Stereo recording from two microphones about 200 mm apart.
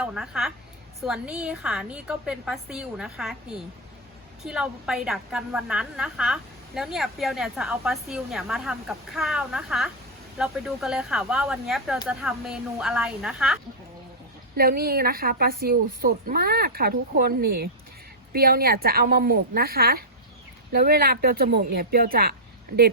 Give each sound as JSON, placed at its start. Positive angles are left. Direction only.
{"t": 0.0, "sound": "a woman's voice", "side_deg": -5}
{"t": 14.5, "sound": "a woman's voice", "side_deg": -50}